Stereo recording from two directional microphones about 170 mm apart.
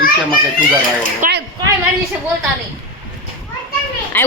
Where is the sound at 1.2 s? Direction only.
65° right (ahead or behind).